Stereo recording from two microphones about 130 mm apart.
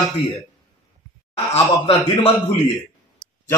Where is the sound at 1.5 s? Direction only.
50° left (ahead or behind).